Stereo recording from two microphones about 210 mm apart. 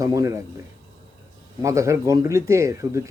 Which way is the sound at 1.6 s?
15° right (ahead or behind).